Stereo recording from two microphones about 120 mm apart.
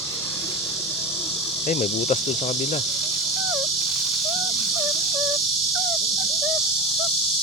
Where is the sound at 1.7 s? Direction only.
75° left (ahead or behind).